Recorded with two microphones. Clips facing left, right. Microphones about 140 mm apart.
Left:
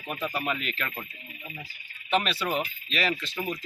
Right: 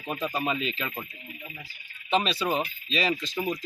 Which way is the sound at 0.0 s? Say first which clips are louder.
Right 2 dB; 20° right (ahead or behind).